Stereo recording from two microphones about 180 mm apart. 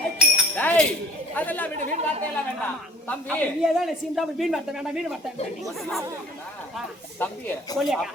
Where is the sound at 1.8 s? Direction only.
40° right (ahead or behind).